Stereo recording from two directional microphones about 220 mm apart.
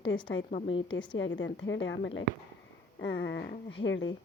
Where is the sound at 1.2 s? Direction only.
55° left (ahead or behind).